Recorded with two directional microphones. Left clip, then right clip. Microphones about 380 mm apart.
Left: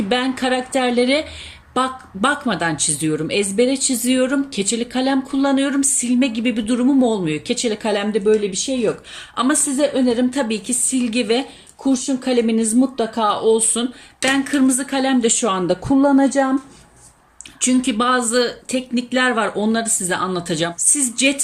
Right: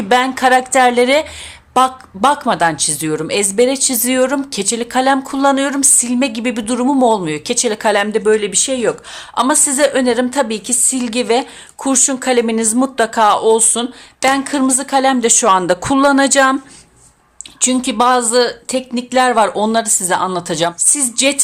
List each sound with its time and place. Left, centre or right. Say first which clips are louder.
0.1 s speech: right 9 dB; centre
17.6 s speech: right 5 dB; centre